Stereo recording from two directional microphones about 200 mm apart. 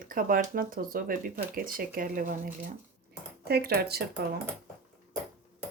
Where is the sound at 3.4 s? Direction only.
50° right (ahead or behind).